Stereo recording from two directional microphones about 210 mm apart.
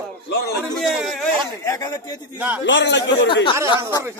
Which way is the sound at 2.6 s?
55° left (ahead or behind).